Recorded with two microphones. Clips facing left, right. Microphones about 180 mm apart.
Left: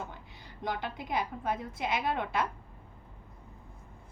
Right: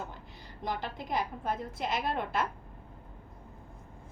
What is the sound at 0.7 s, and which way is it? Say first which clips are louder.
A woman's voice: even; centre (ahead or behind).